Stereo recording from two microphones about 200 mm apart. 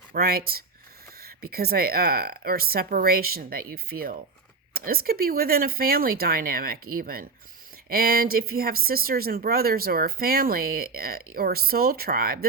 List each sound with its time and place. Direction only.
0.1 s speech: 50° right (ahead or behind)